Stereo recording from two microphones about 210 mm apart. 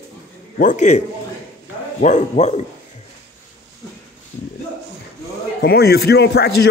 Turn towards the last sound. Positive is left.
turn(degrees=50)  # may be behind; listen again after turning